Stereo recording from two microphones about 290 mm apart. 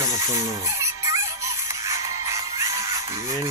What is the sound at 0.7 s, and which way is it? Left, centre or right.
Music, centre.